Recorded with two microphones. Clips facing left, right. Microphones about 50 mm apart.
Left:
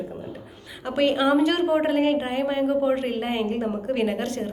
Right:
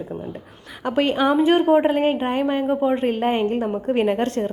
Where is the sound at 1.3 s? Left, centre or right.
Centre.